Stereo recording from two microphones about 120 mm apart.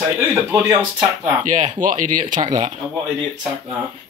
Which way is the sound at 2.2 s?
35° right (ahead or behind).